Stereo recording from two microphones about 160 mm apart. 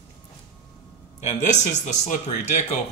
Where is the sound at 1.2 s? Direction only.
45° left (ahead or behind).